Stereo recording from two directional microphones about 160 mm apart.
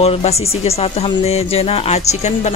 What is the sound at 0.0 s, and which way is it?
Speech, 40° left (ahead or behind).